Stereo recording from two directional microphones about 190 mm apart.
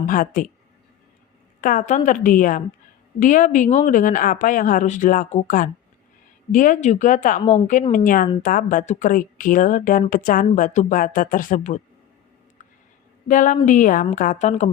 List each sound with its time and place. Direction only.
0.0 s speech: 45° left (ahead or behind)
1.6 s speech: 40° left (ahead or behind)
13.2 s speech: 45° left (ahead or behind)